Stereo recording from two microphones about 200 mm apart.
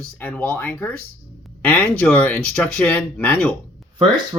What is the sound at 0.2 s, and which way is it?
Speech, 10° left (ahead or behind).